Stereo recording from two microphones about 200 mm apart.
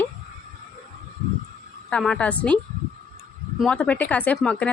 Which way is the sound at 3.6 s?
5° left (ahead or behind).